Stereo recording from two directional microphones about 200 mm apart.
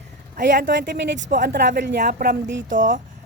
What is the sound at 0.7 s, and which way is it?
A woman's voice, 60° right (ahead or behind).